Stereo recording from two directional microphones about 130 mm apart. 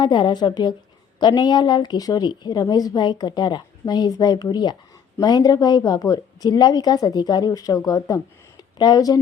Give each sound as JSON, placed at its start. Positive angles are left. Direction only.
{"t": 0.0, "sound": "a woman's voice", "side_deg": 35}